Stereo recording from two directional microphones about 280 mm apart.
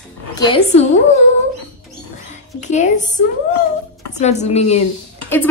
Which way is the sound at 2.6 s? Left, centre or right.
Left.